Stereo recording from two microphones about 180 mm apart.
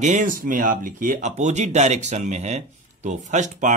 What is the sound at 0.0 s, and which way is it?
Speech, 45° right (ahead or behind).